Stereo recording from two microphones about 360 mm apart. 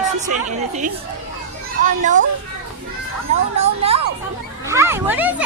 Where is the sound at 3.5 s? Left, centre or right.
Centre.